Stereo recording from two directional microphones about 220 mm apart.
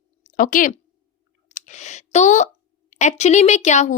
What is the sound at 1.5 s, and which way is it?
Speech, 35° left (ahead or behind).